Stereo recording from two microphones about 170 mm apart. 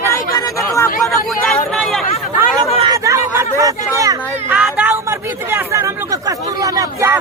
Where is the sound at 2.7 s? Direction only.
25° right (ahead or behind).